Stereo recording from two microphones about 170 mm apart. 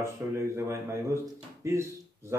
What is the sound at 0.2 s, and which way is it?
Speech, 15° right (ahead or behind).